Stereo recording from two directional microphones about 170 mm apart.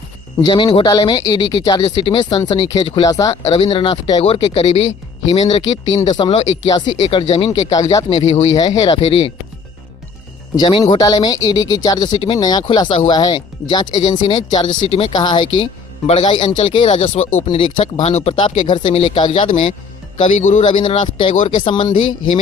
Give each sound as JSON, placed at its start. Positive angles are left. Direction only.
{"t": 0.4, "sound": "speech", "side_deg": 30}
{"t": 3.4, "sound": "speech", "side_deg": 35}
{"t": 7.7, "sound": "speech", "side_deg": 25}
{"t": 8.1, "sound": "speech", "side_deg": 40}
{"t": 8.5, "sound": "speech", "side_deg": 25}
{"t": 9.0, "sound": "speech", "side_deg": 35}
{"t": 10.5, "sound": "speech", "side_deg": 30}
{"t": 20.2, "sound": "a man's voice", "side_deg": 45}
{"t": 20.8, "sound": "speech", "side_deg": 30}